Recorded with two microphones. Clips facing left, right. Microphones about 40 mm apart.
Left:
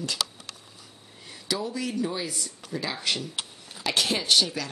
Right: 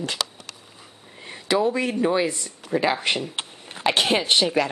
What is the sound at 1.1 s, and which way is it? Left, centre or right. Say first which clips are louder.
Speech: right 9 dB; right.